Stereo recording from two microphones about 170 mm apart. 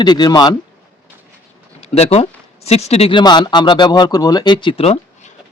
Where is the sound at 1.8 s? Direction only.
35° left (ahead or behind).